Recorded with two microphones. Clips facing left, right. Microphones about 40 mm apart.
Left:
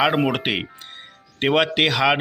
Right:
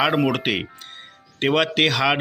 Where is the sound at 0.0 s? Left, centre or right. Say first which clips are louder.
Even; centre.